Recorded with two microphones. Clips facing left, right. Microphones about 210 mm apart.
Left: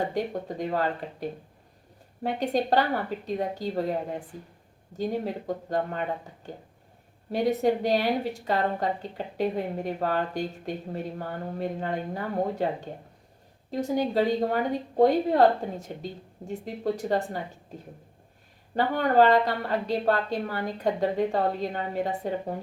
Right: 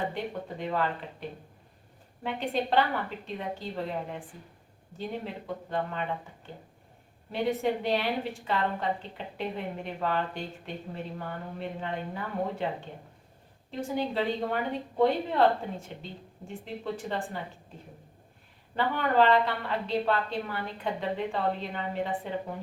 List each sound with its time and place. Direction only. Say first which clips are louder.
0.0 s a woman's voice: left 5 dB; 40° left (ahead or behind)
18.7 s a woman's voice: left 4 dB; 40° left (ahead or behind)